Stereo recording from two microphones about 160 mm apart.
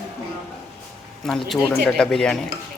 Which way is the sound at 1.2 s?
5° left (ahead or behind).